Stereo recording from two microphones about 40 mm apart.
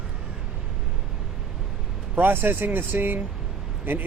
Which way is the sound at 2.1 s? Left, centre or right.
Right.